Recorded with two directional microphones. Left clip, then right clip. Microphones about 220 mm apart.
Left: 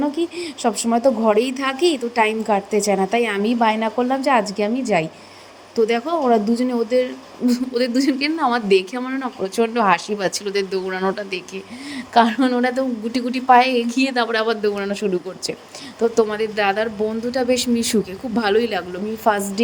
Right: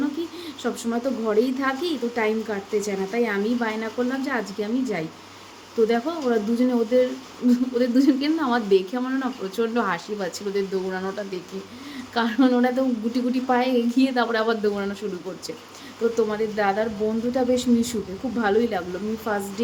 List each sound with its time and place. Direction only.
0.6 s speech: 30° left (ahead or behind)
16.1 s speech: 35° left (ahead or behind)